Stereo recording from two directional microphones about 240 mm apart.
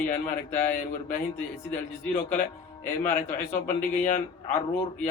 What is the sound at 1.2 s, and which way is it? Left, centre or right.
A man's voice, centre.